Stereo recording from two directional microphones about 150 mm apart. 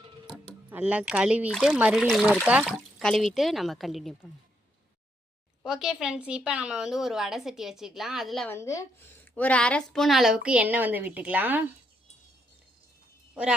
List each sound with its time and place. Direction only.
0.7 s a woman's voice: 10° right (ahead or behind)
5.6 s a woman's voice: 5° right (ahead or behind)
8.4 s a woman's voice: 20° left (ahead or behind)
9.2 s a woman's voice: 10° left (ahead or behind); by 11.6 s 10° right (ahead or behind)